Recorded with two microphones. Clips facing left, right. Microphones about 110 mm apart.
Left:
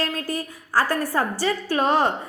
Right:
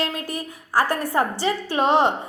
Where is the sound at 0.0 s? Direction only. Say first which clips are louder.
Even; 20° right (ahead or behind).